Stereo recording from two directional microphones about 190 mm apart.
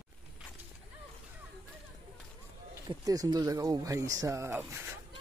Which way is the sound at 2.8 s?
20° right (ahead or behind).